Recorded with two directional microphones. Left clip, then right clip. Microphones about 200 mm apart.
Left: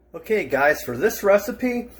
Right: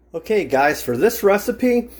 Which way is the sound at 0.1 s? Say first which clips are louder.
Right 3 dB; 40° right (ahead or behind).